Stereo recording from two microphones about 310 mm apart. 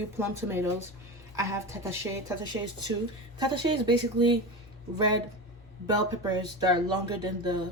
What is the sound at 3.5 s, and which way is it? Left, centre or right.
Speech, centre.